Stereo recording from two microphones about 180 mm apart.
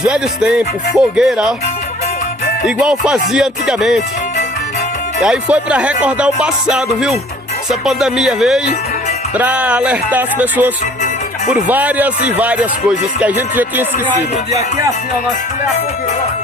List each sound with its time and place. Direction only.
0.0 s speech: 5° right (ahead or behind)
2.6 s speech: 5° right (ahead or behind)
5.2 s speech: 5° right (ahead or behind)
13.2 s speech: 10° right (ahead or behind)